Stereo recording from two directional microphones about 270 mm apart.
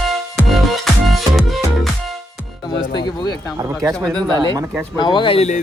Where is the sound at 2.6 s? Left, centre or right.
Centre.